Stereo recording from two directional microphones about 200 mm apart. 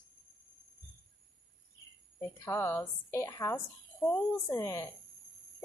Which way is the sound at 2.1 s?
15° left (ahead or behind).